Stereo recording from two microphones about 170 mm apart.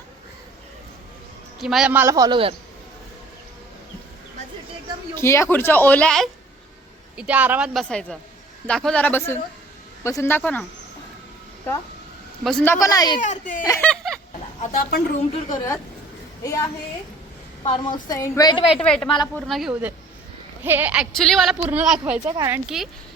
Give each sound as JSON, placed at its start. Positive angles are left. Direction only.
{"t": 1.5, "sound": "a woman's voice", "side_deg": 0}
{"t": 5.1, "sound": "speech", "side_deg": 15}
{"t": 7.2, "sound": "a woman's voice", "side_deg": -10}
{"t": 12.4, "sound": "speech", "side_deg": 0}
{"t": 12.6, "sound": "a woman's voice", "side_deg": 15}
{"t": 13.1, "sound": "speech", "side_deg": 45}
{"t": 13.7, "sound": "a sound", "side_deg": 10}
{"t": 14.6, "sound": "a woman's voice", "side_deg": 60}
{"t": 15.4, "sound": "a woman's voice", "side_deg": 20}
{"t": 17.6, "sound": "a woman's voice", "side_deg": 30}
{"t": 18.8, "sound": "a woman's voice", "side_deg": 5}
{"t": 19.0, "sound": "a woman's voice", "side_deg": 25}
{"t": 19.5, "sound": "a woman's voice", "side_deg": 0}
{"t": 22.4, "sound": "a woman's voice", "side_deg": -15}